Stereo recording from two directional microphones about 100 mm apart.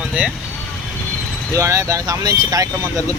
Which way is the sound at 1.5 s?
30° right (ahead or behind).